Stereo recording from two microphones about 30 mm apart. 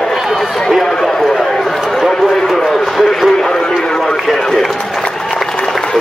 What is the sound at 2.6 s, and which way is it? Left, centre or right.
Speech, centre.